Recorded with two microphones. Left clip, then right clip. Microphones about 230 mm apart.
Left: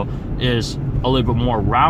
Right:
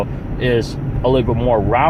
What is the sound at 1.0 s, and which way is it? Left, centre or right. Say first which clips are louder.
Speech: right 4 dB; left.